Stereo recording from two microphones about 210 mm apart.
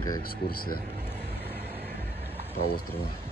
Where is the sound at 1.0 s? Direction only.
10° left (ahead or behind).